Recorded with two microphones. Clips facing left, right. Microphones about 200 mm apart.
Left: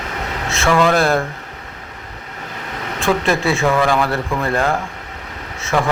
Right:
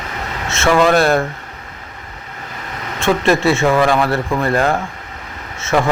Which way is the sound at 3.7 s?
15° right (ahead or behind).